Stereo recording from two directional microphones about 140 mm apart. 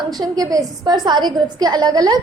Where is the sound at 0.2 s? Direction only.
25° right (ahead or behind).